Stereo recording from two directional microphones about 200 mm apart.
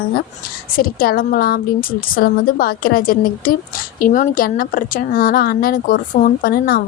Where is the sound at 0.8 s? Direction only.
45° left (ahead or behind).